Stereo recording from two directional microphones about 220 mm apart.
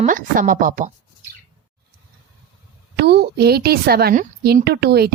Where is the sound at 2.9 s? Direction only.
50° right (ahead or behind).